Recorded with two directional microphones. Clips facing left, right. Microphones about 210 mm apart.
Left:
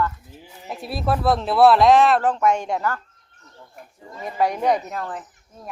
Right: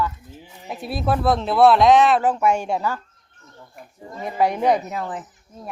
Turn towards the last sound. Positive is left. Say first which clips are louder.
# right 2 dB
turn(degrees=-5)  # may be behind; listen again after turning